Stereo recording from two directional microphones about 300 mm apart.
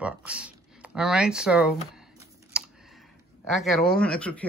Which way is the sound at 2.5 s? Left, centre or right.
Centre.